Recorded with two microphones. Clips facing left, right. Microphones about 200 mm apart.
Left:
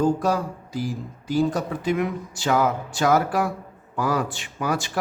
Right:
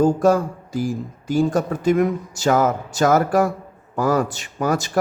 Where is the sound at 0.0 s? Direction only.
45° right (ahead or behind).